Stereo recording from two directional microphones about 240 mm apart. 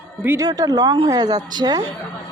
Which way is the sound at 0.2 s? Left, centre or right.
Centre.